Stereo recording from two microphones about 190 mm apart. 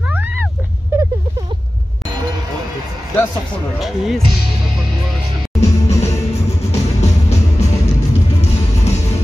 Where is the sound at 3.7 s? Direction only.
Centre (ahead or behind).